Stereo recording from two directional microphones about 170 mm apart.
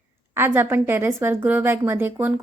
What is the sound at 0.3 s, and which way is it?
A woman's voice, 10° right (ahead or behind).